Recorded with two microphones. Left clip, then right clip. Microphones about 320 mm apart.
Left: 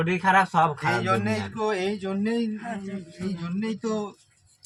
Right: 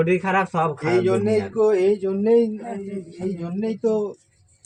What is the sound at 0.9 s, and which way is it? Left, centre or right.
Speech, left.